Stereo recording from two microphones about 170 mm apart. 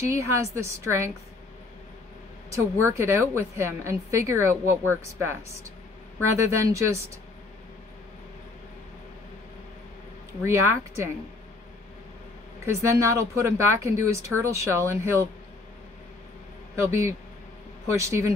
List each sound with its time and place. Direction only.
0.0 s a woman's voice: 15° right (ahead or behind)
2.5 s a woman's voice: 15° right (ahead or behind)
10.4 s a woman's voice: 15° right (ahead or behind)
12.6 s a woman's voice: 15° right (ahead or behind)
16.8 s a woman's voice: 15° right (ahead or behind)